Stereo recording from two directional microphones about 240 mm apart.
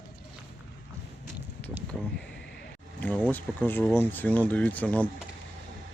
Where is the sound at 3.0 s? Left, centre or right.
Centre.